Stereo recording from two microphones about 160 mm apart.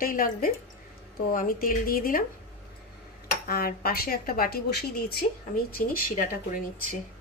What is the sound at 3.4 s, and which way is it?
Speech, 70° left (ahead or behind).